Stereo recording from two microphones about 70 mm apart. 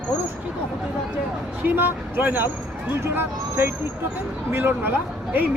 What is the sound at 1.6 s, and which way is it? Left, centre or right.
Speech, right.